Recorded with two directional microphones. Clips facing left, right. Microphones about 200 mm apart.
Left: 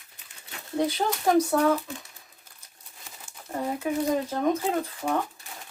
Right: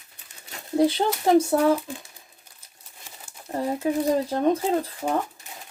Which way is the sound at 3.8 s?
30° right (ahead or behind).